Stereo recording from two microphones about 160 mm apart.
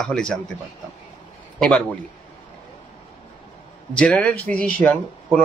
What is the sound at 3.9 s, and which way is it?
A man's voice, 5° left (ahead or behind).